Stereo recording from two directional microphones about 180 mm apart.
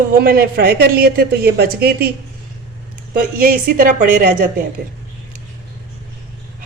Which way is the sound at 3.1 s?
55° right (ahead or behind).